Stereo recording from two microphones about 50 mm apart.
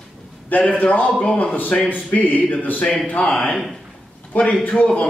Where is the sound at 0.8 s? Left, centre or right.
Left.